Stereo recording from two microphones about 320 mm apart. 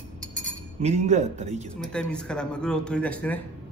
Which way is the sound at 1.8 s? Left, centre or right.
Centre.